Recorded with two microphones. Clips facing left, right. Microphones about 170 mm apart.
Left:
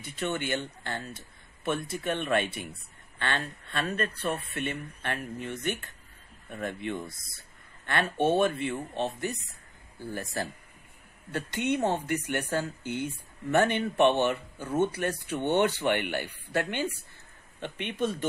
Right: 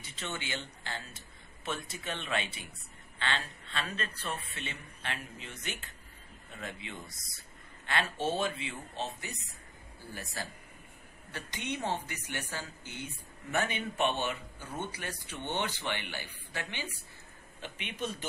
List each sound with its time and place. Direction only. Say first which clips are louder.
0.0 s speech: left 9 dB; 55° left (ahead or behind)